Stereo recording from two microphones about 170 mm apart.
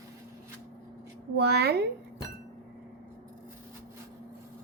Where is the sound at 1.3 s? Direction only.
75° right (ahead or behind).